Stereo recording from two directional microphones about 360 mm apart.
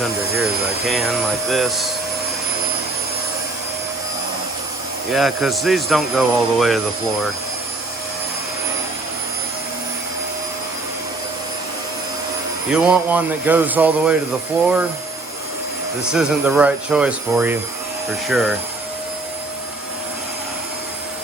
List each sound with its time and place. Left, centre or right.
1.0 s speech: centre
5.1 s speech: centre
12.7 s speech: centre
16.1 s speech: centre